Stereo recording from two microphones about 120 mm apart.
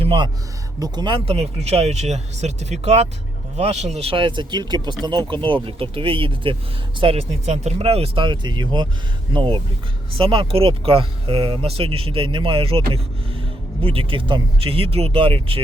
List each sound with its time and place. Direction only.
0.0 s speech: 40° right (ahead or behind)
7.0 s speech: 60° right (ahead or behind)